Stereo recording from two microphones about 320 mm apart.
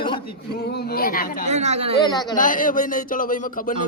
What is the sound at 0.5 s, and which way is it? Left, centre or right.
Speech, left.